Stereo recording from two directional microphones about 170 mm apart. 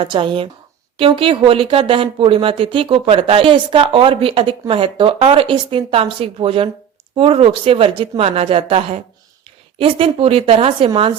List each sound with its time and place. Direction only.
0.0 s speech: 30° right (ahead or behind)